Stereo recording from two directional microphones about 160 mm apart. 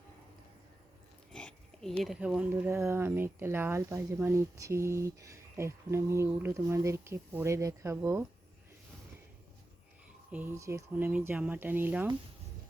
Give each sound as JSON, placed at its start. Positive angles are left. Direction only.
{"t": 1.3, "sound": "speech", "side_deg": 5}
{"t": 10.3, "sound": "speech", "side_deg": -15}